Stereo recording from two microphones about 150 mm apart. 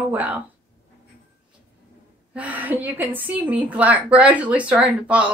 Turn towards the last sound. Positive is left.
turn(degrees=-10)  # may be behind; listen again after turning